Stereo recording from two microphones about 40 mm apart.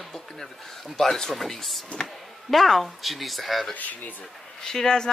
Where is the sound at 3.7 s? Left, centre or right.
Left.